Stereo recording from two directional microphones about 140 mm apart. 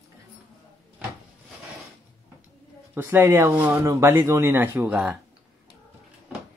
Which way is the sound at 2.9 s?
15° right (ahead or behind).